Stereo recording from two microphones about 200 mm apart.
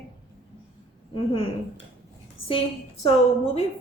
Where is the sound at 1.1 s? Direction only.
25° left (ahead or behind).